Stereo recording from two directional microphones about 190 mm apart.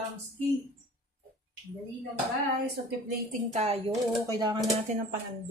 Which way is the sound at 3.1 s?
55° right (ahead or behind).